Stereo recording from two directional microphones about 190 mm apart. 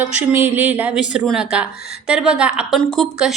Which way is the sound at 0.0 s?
10° right (ahead or behind).